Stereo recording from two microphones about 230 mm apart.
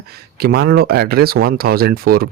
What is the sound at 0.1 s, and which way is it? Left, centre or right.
Speech, right.